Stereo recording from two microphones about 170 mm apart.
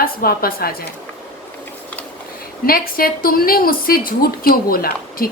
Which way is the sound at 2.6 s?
60° left (ahead or behind).